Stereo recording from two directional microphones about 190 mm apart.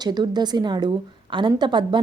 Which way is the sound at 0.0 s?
20° right (ahead or behind).